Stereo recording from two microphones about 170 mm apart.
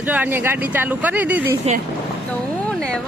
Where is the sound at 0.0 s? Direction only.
10° right (ahead or behind).